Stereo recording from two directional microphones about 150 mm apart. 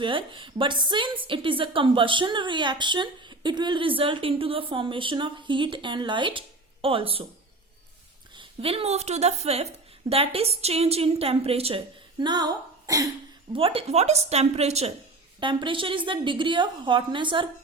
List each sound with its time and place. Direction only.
0.0 s a woman's voice: 35° right (ahead or behind)
8.4 s a woman's voice: 40° right (ahead or behind)
12.2 s speech: 30° right (ahead or behind)
13.5 s a woman's voice: 35° right (ahead or behind)
15.4 s a woman's voice: 35° right (ahead or behind)